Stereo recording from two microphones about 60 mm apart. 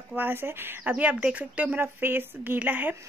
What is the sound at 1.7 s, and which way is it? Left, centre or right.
Speech, right.